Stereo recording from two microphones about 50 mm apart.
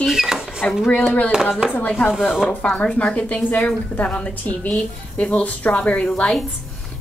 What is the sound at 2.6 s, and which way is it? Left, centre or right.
A woman's voice, left.